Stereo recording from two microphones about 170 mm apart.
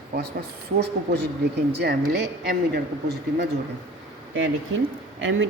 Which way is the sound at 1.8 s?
75° right (ahead or behind).